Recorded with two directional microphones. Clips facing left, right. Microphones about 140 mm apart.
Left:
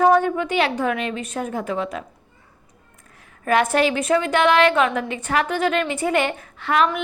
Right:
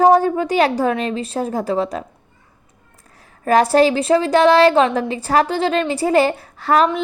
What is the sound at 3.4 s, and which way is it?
A woman's voice, 35° right (ahead or behind).